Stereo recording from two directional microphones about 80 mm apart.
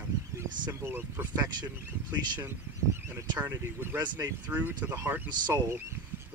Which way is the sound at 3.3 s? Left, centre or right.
Right.